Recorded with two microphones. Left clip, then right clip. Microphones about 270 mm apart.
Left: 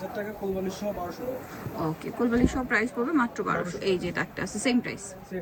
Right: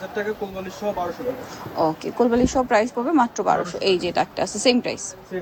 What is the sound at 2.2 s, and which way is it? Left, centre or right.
A woman's voice, centre.